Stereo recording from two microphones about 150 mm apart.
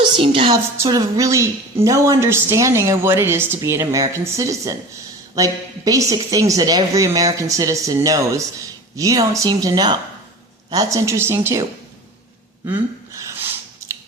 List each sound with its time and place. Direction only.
0.2 s a woman's voice: 35° right (ahead or behind)
0.5 s a woman's voice: 25° right (ahead or behind)
12.6 s a sound: 20° right (ahead or behind)